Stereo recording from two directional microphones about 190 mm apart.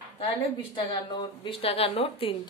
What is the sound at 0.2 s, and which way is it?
Speech, 30° left (ahead or behind).